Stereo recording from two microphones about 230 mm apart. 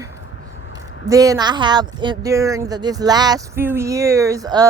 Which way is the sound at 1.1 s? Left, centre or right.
Centre.